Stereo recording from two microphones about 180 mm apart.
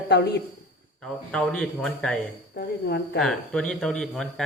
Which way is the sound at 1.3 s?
5° left (ahead or behind).